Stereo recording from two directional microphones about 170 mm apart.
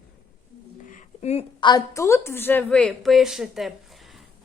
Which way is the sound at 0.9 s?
45° left (ahead or behind).